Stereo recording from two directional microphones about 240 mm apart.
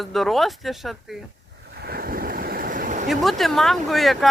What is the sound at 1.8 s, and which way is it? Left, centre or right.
Waves, right.